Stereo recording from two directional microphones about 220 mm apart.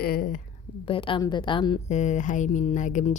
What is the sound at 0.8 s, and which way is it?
Speech, 25° left (ahead or behind).